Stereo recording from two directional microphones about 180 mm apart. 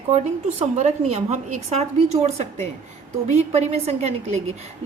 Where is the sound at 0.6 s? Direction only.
40° right (ahead or behind).